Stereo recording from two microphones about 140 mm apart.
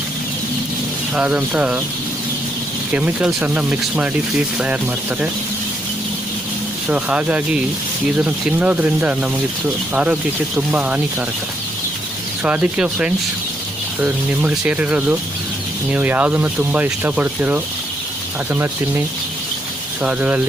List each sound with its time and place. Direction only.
1.1 s speech: 10° right (ahead or behind)
2.9 s speech: 10° right (ahead or behind)
6.8 s speech: 5° right (ahead or behind)
12.5 s speech: 10° right (ahead or behind)